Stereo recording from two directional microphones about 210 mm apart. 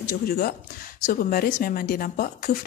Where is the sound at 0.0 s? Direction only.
45° left (ahead or behind).